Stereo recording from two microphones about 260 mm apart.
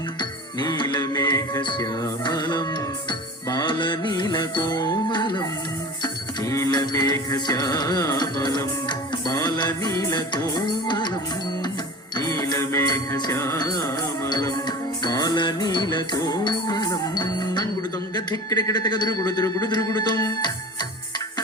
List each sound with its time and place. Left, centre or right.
0.2 s music: centre
12.1 s music: centre
18.1 s speech: centre